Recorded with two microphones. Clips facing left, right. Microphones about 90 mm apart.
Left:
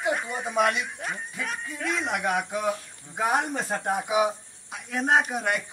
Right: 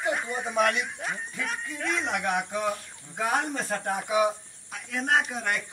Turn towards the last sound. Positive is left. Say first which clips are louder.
# left 3 dB
turn(degrees=15)  # may be behind; listen again after turning